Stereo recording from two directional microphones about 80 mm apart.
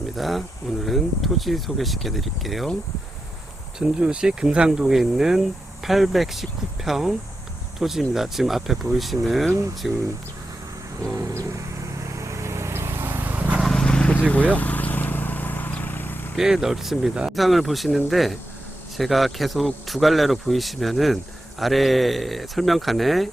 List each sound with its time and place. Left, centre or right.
0.2 s speech: centre
3.8 s speech: centre
11.1 s vehicle: right; by 13.6 s centre
13.6 s a sound: centre
13.8 s vehicle: centre
16.3 s speech: centre